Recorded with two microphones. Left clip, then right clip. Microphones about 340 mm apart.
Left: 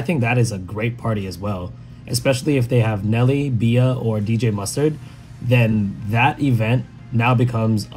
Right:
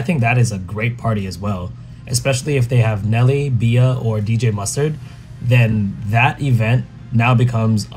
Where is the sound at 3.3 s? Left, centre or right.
Centre.